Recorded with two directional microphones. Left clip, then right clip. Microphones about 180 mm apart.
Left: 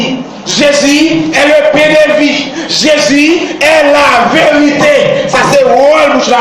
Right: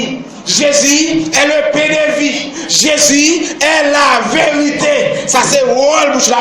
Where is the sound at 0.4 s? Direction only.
20° right (ahead or behind).